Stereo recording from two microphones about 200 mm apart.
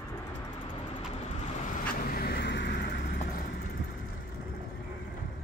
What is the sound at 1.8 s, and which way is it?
Vehicle, 45° left (ahead or behind).